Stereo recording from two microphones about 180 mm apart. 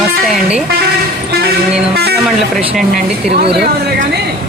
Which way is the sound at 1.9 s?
60° right (ahead or behind).